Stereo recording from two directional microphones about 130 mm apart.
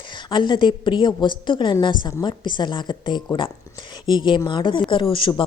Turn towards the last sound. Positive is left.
turn(degrees=40)  # may be behind; listen again after turning